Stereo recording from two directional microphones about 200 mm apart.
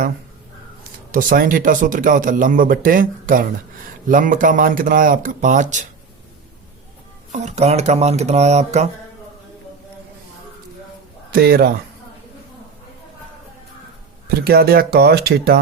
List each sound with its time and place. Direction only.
1.1 s speech: 45° right (ahead or behind)
7.3 s speech: 35° right (ahead or behind)
11.3 s speech: 50° right (ahead or behind)
14.3 s speech: 50° right (ahead or behind)